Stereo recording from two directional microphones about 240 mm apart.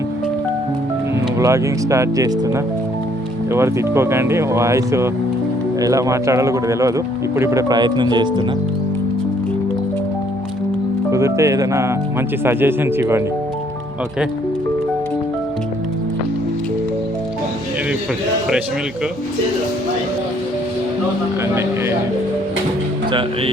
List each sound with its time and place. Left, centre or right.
1.4 s speech: centre
11.1 s speech: centre
21.4 s speech: centre